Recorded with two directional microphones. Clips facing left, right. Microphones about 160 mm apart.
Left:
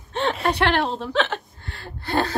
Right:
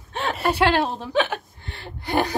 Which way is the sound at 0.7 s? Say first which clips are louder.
Right 1 dB; 15° right (ahead or behind).